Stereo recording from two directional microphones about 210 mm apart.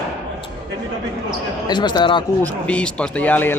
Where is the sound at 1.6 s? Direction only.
20° left (ahead or behind).